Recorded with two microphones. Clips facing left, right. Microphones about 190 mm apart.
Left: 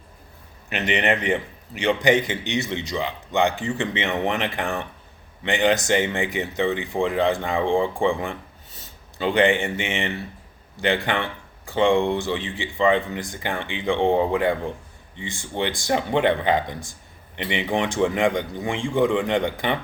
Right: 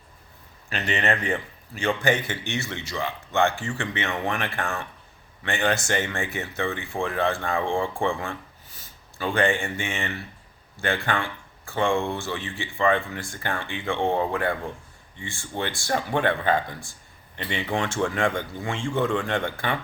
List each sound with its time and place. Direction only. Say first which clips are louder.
0.7 s speech: left 3 dB; 20° left (ahead or behind)